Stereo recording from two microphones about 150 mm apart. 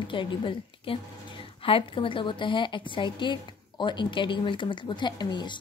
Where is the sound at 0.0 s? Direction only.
30° left (ahead or behind).